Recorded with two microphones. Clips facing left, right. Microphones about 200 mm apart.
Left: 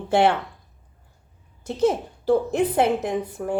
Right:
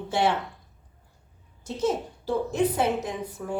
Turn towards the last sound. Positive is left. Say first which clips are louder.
# left 6 dB
turn(degrees=60)  # may be behind; listen again after turning